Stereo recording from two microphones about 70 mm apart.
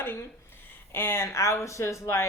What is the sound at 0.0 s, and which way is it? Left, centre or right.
A woman's voice, left.